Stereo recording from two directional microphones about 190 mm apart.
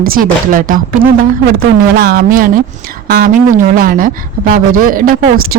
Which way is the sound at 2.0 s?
50° right (ahead or behind).